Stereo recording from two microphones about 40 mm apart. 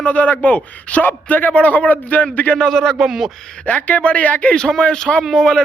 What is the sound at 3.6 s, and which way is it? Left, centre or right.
Speech, left.